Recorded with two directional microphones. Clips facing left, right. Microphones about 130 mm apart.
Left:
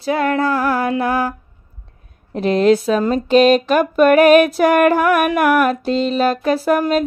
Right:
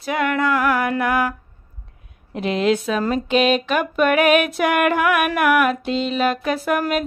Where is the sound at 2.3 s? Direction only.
40° left (ahead or behind).